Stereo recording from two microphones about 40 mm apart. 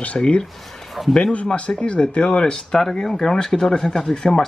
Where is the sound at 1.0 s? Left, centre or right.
Centre.